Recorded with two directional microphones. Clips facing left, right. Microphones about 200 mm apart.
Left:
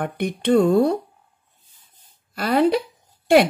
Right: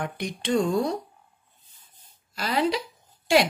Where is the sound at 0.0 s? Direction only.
55° left (ahead or behind).